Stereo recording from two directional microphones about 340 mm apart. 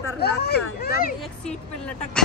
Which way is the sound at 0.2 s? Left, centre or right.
Left.